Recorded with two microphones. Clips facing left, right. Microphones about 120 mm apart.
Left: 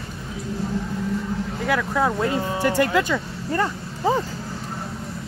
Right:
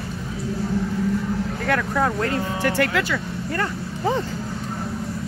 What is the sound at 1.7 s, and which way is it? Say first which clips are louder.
Speech: even; 10° left (ahead or behind).